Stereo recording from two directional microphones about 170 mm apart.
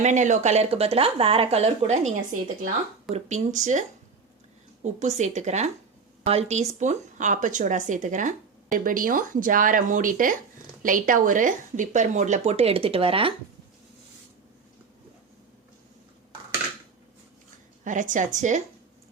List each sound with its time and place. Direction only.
0.0 s speech: 45° right (ahead or behind)
17.8 s speech: 50° right (ahead or behind)